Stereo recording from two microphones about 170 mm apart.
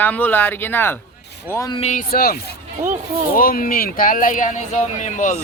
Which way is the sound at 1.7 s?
40° left (ahead or behind).